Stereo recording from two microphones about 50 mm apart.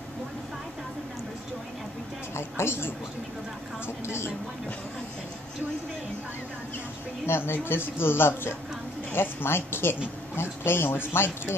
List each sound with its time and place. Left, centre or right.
2.3 s a sound: left
3.8 s a woman's voice: left
7.2 s speech: left